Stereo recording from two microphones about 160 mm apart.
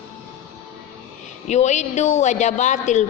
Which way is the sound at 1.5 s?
45° left (ahead or behind).